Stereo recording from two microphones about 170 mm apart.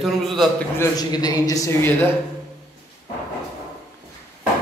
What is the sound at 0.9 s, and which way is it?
Speech, 25° left (ahead or behind).